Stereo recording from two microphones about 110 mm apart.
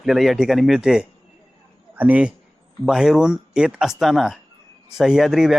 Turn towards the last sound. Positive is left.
turn(degrees=-5)  # may be behind; listen again after turning